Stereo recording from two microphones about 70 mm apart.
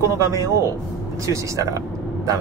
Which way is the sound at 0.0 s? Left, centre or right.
Right.